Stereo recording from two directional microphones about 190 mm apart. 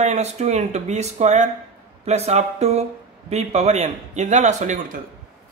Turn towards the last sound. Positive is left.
turn(degrees=-40)  # may be behind; listen again after turning